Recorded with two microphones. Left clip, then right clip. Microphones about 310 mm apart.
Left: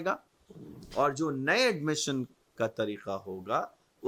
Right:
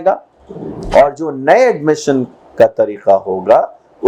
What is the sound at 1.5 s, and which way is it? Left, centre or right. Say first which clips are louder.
Speech: right 19 dB; left.